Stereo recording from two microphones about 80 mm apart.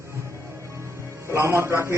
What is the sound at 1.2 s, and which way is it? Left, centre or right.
Speech, right.